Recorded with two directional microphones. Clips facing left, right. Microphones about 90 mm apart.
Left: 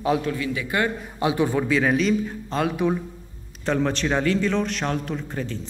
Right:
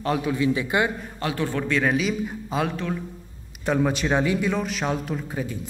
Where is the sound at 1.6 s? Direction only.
Centre (ahead or behind).